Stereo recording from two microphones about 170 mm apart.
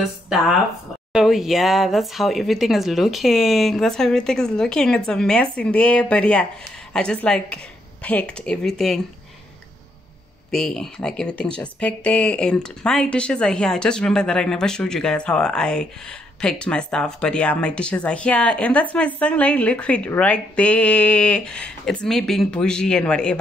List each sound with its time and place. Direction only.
1.1 s speech: centre (ahead or behind)
10.5 s speech: 5° left (ahead or behind)